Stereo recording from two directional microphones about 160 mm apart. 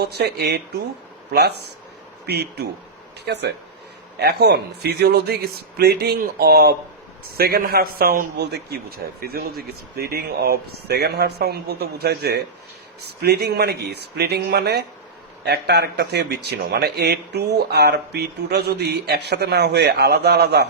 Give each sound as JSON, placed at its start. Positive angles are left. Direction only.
{"t": 0.0, "sound": "a man's voice", "side_deg": -85}
{"t": 9.2, "sound": "speech", "side_deg": -75}